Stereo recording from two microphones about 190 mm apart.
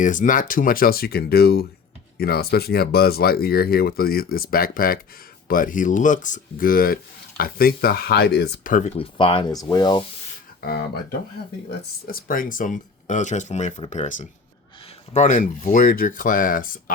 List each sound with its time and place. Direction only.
0.0 s speech: 45° left (ahead or behind)
9.0 s speech: 25° left (ahead or behind)
12.0 s speech: 50° left (ahead or behind)